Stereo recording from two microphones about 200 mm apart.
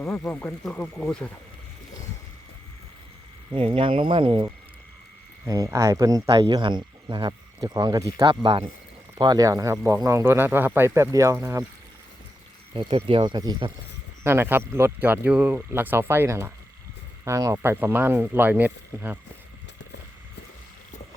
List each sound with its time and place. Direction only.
0.0 s speech: 5° left (ahead or behind)
3.5 s speech: 25° right (ahead or behind)
12.7 s speech: 25° right (ahead or behind); by 19.2 s 10° right (ahead or behind)